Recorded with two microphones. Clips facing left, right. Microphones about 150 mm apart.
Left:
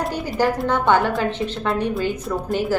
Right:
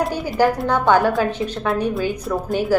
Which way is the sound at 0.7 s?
10° right (ahead or behind).